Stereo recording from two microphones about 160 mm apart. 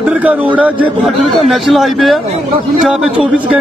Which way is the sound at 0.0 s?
10° right (ahead or behind).